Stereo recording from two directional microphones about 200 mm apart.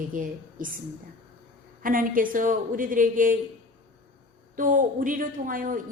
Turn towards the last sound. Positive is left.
turn(degrees=-40)  # may be behind; listen again after turning